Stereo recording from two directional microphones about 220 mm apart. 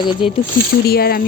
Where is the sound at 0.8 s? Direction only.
45° left (ahead or behind).